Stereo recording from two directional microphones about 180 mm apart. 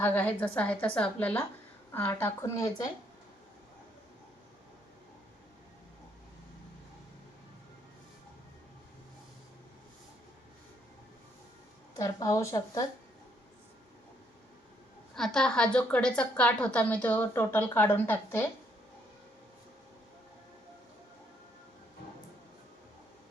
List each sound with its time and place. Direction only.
0.0 s a woman's voice: 10° left (ahead or behind)
11.9 s speech: 20° left (ahead or behind)
15.1 s a woman's voice: 5° left (ahead or behind)